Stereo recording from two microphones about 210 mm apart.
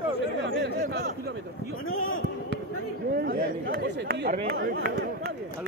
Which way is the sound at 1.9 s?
75° left (ahead or behind).